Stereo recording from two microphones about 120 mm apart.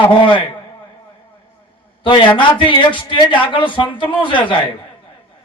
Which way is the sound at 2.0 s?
45° left (ahead or behind).